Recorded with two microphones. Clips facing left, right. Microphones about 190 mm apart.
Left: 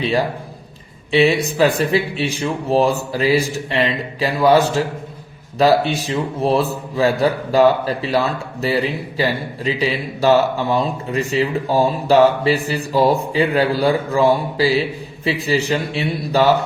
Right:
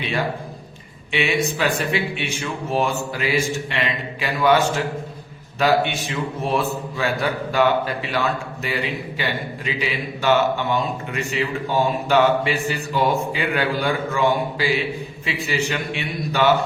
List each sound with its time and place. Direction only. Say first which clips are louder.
0.0 s a man's voice: left 5 dB; 35° left (ahead or behind)